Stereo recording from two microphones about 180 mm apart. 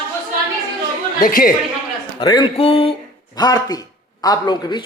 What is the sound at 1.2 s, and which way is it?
Speech, 50° left (ahead or behind).